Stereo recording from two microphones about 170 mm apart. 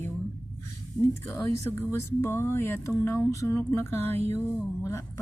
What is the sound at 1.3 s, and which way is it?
A woman's voice, 15° left (ahead or behind).